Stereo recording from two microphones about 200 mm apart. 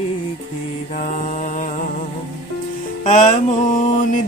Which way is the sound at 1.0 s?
40° left (ahead or behind).